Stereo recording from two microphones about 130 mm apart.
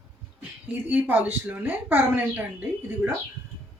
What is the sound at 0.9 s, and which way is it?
A woman's voice, 15° right (ahead or behind).